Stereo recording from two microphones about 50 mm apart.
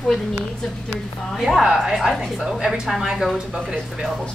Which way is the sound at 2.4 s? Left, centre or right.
Centre.